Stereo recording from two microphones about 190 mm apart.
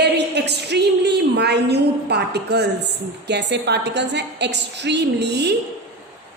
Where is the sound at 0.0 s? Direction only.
60° right (ahead or behind).